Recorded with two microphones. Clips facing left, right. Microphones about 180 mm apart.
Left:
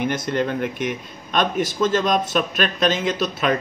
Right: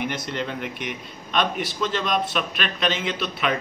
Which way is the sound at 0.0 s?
50° left (ahead or behind).